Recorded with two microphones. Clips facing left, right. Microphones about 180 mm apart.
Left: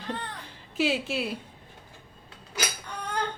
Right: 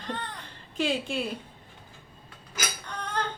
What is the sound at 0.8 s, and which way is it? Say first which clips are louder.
Speech: left 1 dB; 5° left (ahead or behind).